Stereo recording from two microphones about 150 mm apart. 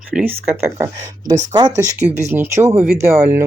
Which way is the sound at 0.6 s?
20° right (ahead or behind).